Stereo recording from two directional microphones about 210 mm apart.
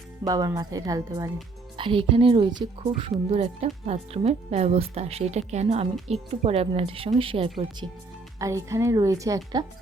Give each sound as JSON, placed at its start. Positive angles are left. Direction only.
{"t": 0.3, "sound": "speech", "side_deg": -15}
{"t": 8.4, "sound": "speech", "side_deg": -15}